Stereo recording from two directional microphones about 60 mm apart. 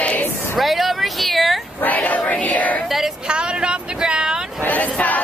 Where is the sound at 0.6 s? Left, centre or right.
Centre.